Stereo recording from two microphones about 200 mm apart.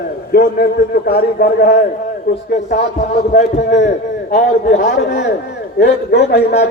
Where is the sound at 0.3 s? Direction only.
50° left (ahead or behind).